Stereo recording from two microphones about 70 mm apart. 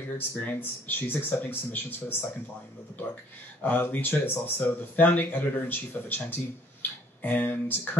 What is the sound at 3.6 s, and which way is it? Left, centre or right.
Speech, left.